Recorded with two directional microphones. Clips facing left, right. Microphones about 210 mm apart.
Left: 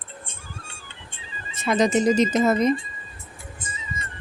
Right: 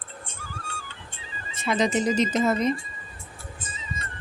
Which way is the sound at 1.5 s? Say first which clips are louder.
Left 4 dB; 45° left (ahead or behind).